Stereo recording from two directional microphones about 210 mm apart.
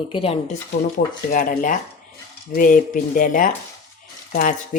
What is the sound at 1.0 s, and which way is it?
Speech, 40° left (ahead or behind).